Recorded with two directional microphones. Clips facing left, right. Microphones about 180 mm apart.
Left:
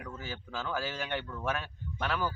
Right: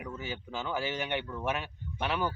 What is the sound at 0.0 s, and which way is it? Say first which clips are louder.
Speech: right 3 dB; 20° right (ahead or behind).